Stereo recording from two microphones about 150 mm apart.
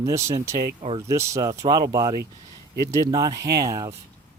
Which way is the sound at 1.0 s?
20° right (ahead or behind).